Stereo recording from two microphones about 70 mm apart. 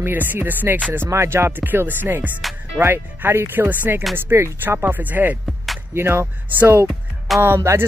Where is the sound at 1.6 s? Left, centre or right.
Right.